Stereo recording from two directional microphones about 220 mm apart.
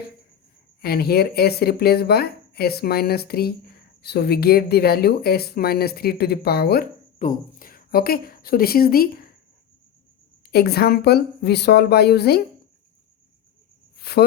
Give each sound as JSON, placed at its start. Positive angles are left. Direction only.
{"t": 0.8, "sound": "speech", "side_deg": 45}
{"t": 10.5, "sound": "speech", "side_deg": 45}
{"t": 13.9, "sound": "cricket", "side_deg": 45}